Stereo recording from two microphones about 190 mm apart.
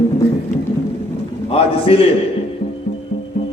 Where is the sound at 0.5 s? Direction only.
45° left (ahead or behind).